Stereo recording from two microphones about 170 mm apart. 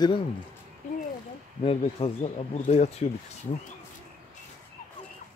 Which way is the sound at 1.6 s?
35° left (ahead or behind).